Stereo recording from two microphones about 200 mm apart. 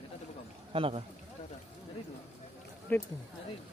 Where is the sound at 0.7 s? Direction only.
25° right (ahead or behind).